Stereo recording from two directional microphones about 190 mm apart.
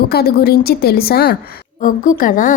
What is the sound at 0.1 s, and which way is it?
A woman's voice, 55° left (ahead or behind).